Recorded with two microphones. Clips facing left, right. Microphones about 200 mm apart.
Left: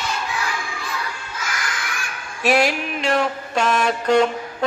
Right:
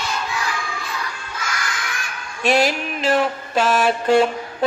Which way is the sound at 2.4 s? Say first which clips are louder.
Even; centre (ahead or behind).